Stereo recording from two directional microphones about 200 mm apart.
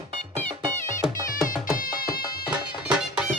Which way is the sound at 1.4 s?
45° left (ahead or behind).